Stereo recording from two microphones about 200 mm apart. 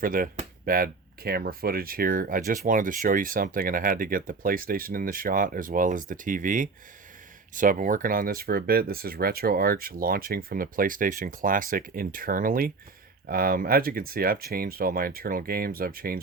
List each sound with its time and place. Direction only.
0.0 s speech: 45° right (ahead or behind)